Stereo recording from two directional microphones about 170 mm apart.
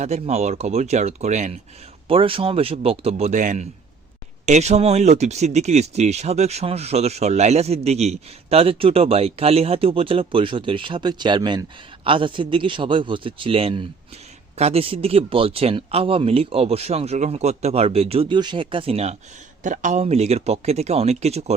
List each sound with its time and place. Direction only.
0.0 s speech: 40° right (ahead or behind)
2.0 s speech: 30° right (ahead or behind)
19.6 s speech: 50° right (ahead or behind)